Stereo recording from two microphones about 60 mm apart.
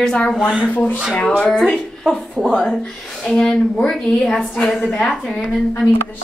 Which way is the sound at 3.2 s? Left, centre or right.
Centre.